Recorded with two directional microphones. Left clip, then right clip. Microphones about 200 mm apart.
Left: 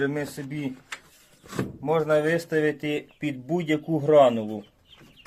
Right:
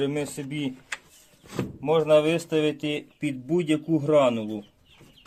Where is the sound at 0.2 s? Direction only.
15° right (ahead or behind).